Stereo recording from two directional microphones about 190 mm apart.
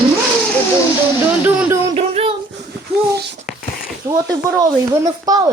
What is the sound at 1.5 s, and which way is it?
Speech, 10° right (ahead or behind).